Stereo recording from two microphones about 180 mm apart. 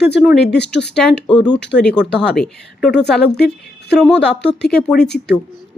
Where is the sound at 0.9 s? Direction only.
5° left (ahead or behind).